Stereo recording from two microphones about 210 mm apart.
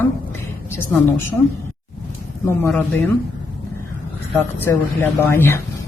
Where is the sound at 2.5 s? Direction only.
10° left (ahead or behind).